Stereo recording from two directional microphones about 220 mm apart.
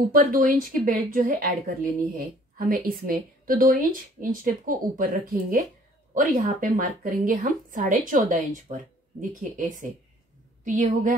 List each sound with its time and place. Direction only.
0.1 s a woman's voice: 40° right (ahead or behind)